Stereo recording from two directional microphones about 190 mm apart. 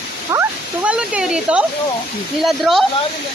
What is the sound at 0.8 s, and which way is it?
Speech, 5° right (ahead or behind).